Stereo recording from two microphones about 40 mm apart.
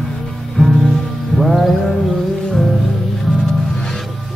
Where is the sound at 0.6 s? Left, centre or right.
Left.